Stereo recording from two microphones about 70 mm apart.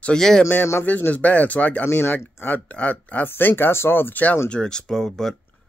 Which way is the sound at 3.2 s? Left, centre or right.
Left.